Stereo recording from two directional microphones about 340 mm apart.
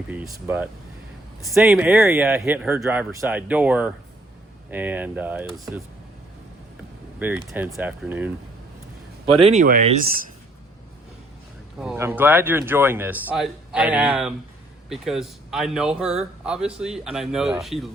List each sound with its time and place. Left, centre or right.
0.1 s speech: centre
7.2 s speech: centre
9.2 s speech: centre
11.8 s speech: centre